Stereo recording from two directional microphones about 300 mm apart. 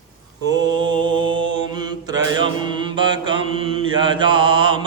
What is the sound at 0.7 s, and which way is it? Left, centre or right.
Mantra, centre.